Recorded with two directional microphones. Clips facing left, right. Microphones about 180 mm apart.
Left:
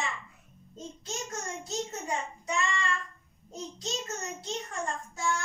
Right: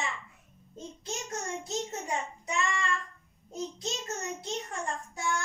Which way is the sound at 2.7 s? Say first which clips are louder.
Even; 20° right (ahead or behind).